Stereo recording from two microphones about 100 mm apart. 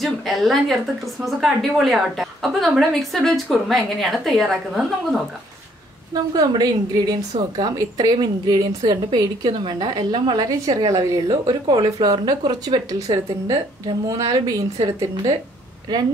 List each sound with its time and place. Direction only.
0.0 s speech: centre (ahead or behind)
6.1 s a woman's voice: 40° right (ahead or behind)